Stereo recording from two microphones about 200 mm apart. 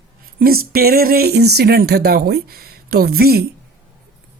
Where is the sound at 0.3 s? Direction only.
50° right (ahead or behind).